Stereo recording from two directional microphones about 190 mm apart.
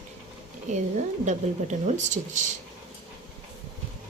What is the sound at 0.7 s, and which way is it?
A woman's voice, 40° right (ahead or behind).